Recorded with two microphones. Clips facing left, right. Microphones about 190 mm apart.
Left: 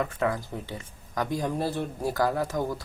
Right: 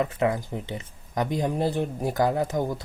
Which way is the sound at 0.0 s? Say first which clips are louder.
Right 3 dB; 20° right (ahead or behind).